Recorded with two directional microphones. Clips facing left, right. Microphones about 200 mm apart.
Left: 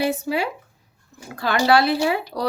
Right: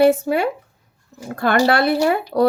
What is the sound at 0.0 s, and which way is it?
Speech, 55° right (ahead or behind).